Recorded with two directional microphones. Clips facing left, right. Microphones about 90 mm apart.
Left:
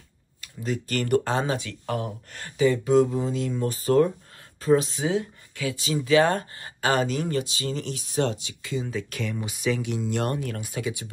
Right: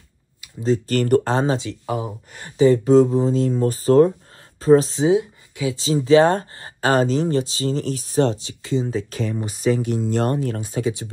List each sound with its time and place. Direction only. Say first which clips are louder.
0.6 s speech: right 9 dB; 25° right (ahead or behind)
0.9 s speech: right 4 dB; 40° right (ahead or behind); by 1.8 s 25° right (ahead or behind)
1.9 s speech: right 3 dB; 10° right (ahead or behind)
2.5 s speech: right 6 dB; 35° right (ahead or behind)
5.0 s speech: right 8 dB; 20° right (ahead or behind)
5.8 s speech: right 6 dB; 30° right (ahead or behind)